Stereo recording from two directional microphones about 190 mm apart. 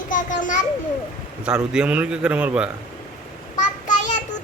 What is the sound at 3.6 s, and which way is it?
Child singing, 40° left (ahead or behind).